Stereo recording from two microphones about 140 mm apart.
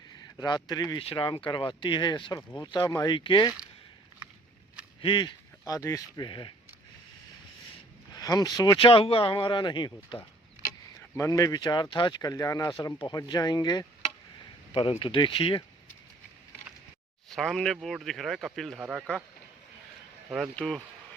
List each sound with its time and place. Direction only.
0.2 s speech: 30° left (ahead or behind)
4.9 s speech: 35° left (ahead or behind)
8.1 s speech: 25° left (ahead or behind)
11.1 s speech: 20° left (ahead or behind); by 15.6 s 40° left (ahead or behind)
17.2 s speech: 5° left (ahead or behind)
18.8 s speech: 10° right (ahead or behind)
20.6 s speech: 10° left (ahead or behind)